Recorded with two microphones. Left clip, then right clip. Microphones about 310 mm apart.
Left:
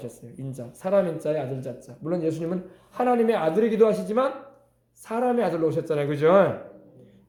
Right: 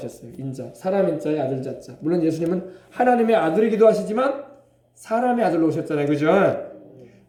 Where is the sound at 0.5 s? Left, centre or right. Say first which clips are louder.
Even; left.